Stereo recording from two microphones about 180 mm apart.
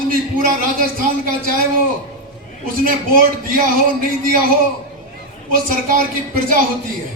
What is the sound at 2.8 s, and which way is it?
Speech, 50° right (ahead or behind).